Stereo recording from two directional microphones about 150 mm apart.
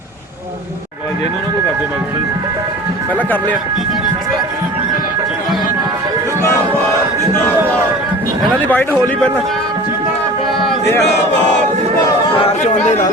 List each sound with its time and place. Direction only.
8.6 s a man's voice: 15° left (ahead or behind)
12.4 s speech: 50° left (ahead or behind)